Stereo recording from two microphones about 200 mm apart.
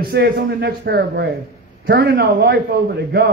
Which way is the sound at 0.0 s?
50° right (ahead or behind).